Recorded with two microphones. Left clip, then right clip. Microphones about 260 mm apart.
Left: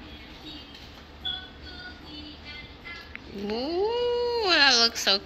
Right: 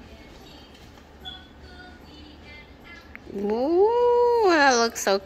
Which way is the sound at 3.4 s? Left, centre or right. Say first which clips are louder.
Right 7 dB; centre.